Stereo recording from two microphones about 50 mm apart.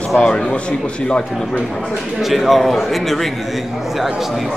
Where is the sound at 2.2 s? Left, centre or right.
Centre.